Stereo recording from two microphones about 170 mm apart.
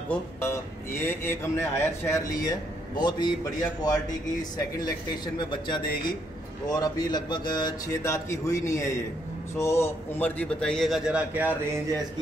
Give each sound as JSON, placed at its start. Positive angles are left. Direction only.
{"t": 0.1, "sound": "a man's voice", "side_deg": 15}